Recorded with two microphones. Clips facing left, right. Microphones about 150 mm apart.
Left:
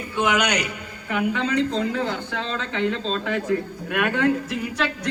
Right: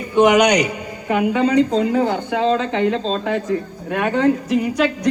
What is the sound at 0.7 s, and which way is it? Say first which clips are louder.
A woman's voice: right 7 dB; 45° right (ahead or behind).